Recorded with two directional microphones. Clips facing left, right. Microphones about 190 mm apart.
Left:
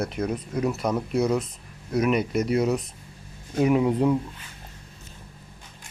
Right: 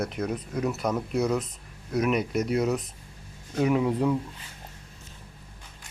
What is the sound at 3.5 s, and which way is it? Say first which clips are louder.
Speech: left 3 dB; 15° left (ahead or behind).